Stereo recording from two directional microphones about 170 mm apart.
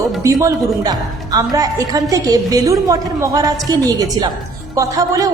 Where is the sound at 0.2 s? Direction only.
20° right (ahead or behind).